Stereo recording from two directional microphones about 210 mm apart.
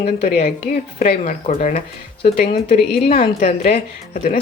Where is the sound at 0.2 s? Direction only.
35° left (ahead or behind).